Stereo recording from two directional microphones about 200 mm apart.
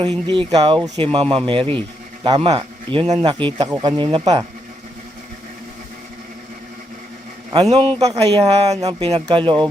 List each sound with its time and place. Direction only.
0.3 s a man's voice: 25° right (ahead or behind)
7.7 s speech: 30° right (ahead or behind)